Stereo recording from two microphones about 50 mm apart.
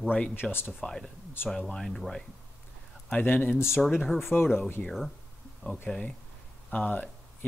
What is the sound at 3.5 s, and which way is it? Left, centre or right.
Speech, left.